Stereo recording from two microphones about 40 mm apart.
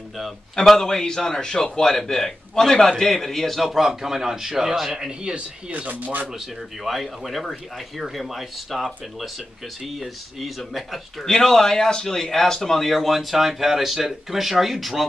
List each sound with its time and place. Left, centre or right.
0.7 s a man's voice: centre
5.7 s speech: right
6.8 s speech: centre
11.2 s a man's voice: centre